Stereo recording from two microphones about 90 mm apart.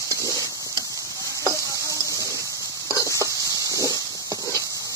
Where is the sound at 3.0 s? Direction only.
35° right (ahead or behind).